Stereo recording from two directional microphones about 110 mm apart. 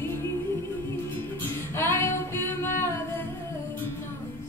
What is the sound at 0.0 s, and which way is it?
Music, 20° left (ahead or behind).